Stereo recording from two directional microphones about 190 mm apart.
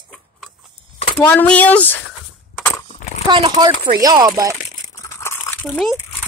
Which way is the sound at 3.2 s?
25° right (ahead or behind).